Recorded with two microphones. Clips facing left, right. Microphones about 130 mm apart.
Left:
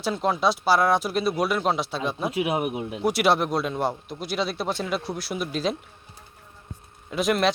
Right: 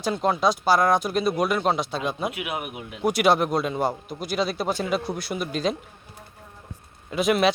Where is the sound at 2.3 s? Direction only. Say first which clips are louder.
Left 6 dB; 35° left (ahead or behind).